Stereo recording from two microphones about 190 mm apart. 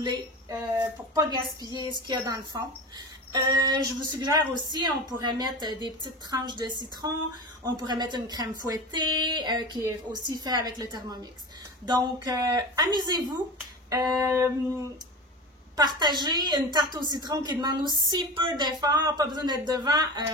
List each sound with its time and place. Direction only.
0.0 s a woman's voice: 20° right (ahead or behind)
13.8 s a sound: 20° right (ahead or behind)
16.0 s a woman's voice: 20° right (ahead or behind)